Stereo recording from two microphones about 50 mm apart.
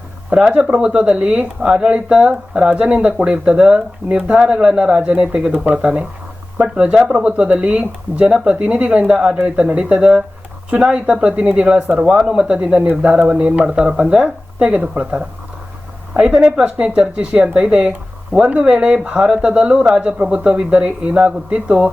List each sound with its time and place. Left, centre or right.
0.3 s speech: right